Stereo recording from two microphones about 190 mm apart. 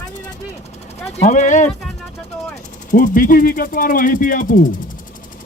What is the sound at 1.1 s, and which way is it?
Speech, 35° left (ahead or behind).